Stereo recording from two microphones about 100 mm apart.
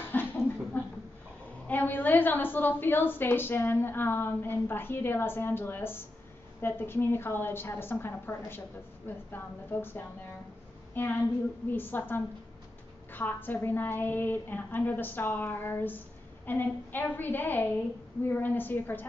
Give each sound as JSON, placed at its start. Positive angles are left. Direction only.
{"t": 0.1, "sound": "a sound", "side_deg": 20}
{"t": 1.7, "sound": "a woman's voice", "side_deg": 20}
{"t": 11.7, "sound": "a woman's voice", "side_deg": 20}